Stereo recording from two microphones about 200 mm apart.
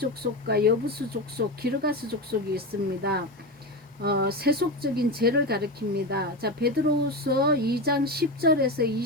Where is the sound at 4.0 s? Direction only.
50° right (ahead or behind).